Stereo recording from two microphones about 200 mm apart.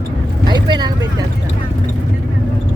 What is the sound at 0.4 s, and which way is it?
Vehicle, 20° right (ahead or behind).